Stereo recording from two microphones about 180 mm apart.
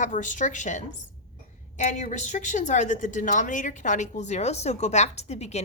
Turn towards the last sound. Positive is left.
turn(degrees=35)  # may be behind; listen again after turning